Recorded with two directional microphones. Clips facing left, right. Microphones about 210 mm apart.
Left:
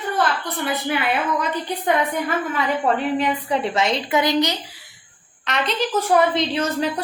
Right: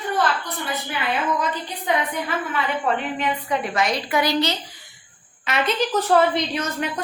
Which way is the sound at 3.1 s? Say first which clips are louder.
Left 3 dB; 30° left (ahead or behind).